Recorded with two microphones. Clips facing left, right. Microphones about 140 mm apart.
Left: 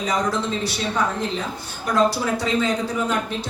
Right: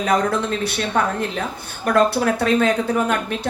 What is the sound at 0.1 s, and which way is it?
A woman's voice, 55° right (ahead or behind).